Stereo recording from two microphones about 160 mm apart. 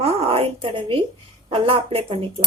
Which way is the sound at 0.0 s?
40° right (ahead or behind).